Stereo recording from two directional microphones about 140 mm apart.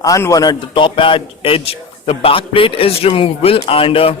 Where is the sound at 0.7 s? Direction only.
35° left (ahead or behind).